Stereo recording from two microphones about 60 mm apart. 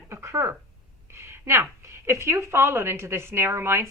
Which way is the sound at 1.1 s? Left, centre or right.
Right.